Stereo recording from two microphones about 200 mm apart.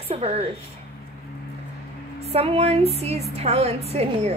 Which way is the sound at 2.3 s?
30° right (ahead or behind).